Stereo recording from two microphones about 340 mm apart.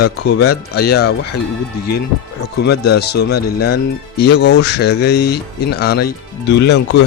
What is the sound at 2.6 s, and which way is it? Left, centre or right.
Speech, left.